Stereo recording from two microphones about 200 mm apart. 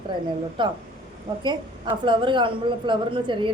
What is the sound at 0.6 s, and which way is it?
A woman's voice, 25° right (ahead or behind).